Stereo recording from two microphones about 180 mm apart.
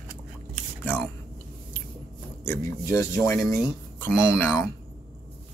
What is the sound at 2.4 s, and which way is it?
Speech, 15° left (ahead or behind).